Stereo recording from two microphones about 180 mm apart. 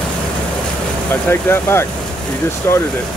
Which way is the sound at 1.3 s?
15° left (ahead or behind).